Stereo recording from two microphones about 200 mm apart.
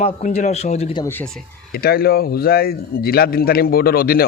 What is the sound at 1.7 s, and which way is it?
A man's voice, 50° left (ahead or behind).